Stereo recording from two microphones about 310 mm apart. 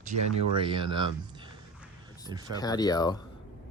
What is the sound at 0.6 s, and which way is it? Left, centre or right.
Speech, centre.